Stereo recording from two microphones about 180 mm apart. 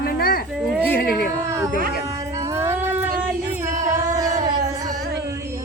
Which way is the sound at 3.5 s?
15° right (ahead or behind).